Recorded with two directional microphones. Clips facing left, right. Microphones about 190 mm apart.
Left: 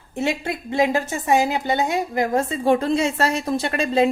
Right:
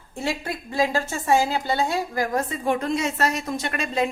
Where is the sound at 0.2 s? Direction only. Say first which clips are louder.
Left 4 dB; 25° left (ahead or behind).